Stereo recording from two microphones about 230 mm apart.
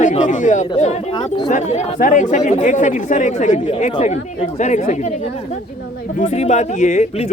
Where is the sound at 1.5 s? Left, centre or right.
Left.